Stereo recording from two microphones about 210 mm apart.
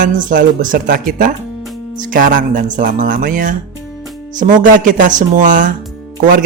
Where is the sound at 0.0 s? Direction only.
40° right (ahead or behind).